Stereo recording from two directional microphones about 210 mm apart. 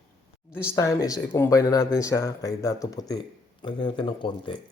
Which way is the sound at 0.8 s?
15° left (ahead or behind).